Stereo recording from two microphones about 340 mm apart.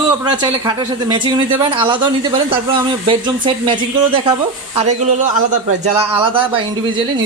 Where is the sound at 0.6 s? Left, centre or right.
Centre.